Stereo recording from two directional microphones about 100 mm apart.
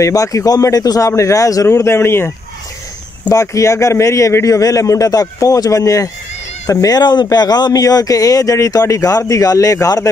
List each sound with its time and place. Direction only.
0.0 s speech: 35° left (ahead or behind)